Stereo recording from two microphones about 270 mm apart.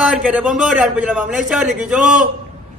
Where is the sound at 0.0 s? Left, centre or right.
Centre.